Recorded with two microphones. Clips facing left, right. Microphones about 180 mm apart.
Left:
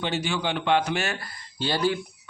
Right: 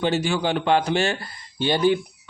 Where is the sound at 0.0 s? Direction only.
40° right (ahead or behind).